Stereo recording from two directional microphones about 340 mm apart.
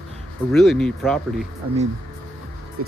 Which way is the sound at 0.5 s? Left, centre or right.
Centre.